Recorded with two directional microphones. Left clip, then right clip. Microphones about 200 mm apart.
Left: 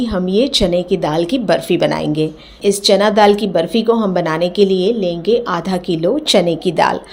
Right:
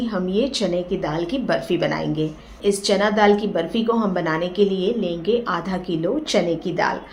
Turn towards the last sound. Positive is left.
turn(degrees=40)  # may be behind; listen again after turning